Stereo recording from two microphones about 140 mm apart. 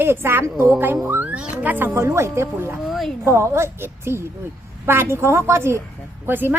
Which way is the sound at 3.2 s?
20° right (ahead or behind).